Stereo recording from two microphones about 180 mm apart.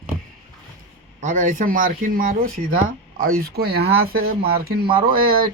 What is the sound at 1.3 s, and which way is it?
Speech, 45° right (ahead or behind).